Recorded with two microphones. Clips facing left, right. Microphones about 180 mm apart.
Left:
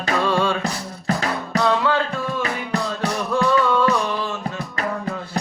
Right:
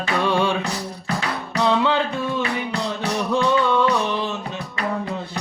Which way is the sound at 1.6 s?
20° right (ahead or behind).